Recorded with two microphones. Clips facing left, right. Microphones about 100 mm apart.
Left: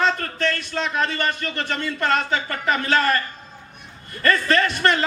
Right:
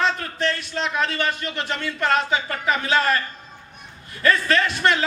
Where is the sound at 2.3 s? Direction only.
45° left (ahead or behind).